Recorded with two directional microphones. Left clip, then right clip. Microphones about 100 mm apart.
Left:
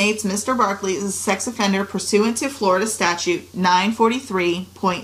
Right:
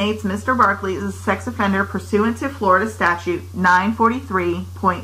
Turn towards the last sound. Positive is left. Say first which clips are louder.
# right 1 dB
turn(degrees=20)  # may be behind; listen again after turning